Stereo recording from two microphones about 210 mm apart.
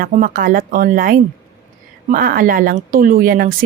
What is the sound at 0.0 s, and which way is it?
Speech, 40° right (ahead or behind).